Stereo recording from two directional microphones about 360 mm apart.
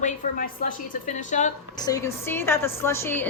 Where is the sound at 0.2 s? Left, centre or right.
Left.